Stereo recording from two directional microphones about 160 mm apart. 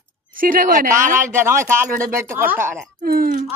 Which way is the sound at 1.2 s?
15° right (ahead or behind).